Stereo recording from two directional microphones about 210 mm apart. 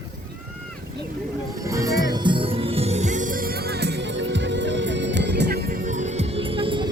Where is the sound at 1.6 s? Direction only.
15° right (ahead or behind).